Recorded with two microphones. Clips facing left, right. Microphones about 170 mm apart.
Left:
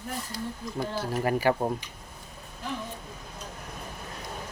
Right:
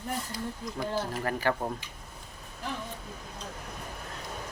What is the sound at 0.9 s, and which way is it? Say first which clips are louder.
Speech: left 5 dB; 10° left (ahead or behind).